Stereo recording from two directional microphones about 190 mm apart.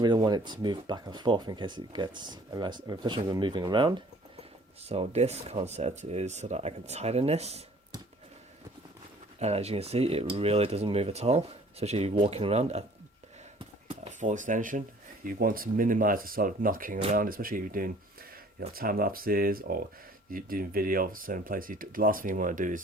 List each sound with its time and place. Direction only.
0.0 s speech: 20° right (ahead or behind)
9.4 s speech: 35° right (ahead or behind)
13.9 s speech: 40° right (ahead or behind)